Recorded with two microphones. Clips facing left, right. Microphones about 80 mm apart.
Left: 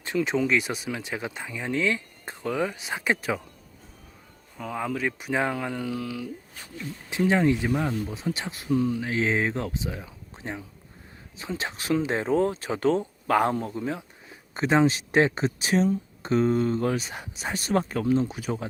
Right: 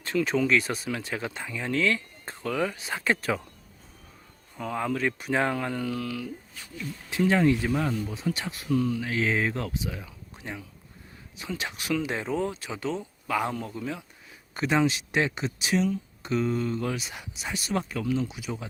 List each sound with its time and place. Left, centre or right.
0.0 s speech: centre
4.5 s speech: centre
6.6 s speech: left